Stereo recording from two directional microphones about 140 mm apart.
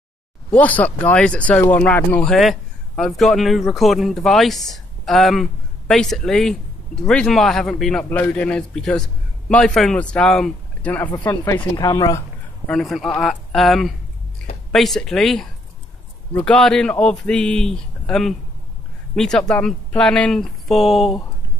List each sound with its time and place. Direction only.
0.5 s speech: 10° left (ahead or behind)
2.3 s speech: centre (ahead or behind)
11.7 s speech: 30° left (ahead or behind)
12.6 s speech: centre (ahead or behind)